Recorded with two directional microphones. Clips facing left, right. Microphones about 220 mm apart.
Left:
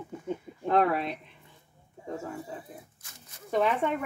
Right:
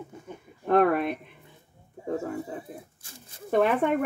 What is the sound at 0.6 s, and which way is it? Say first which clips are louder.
Speech: right 4 dB; 50° right (ahead or behind).